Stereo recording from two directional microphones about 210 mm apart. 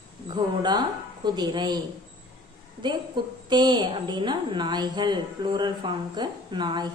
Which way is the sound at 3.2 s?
20° right (ahead or behind).